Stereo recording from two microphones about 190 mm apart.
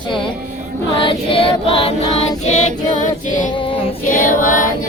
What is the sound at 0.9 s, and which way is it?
Choir, 25° left (ahead or behind).